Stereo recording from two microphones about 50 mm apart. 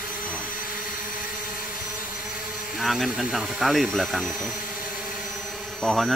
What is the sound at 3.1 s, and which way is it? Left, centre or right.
Speech, centre.